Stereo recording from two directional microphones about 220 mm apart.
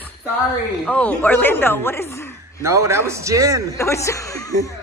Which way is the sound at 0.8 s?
5° left (ahead or behind).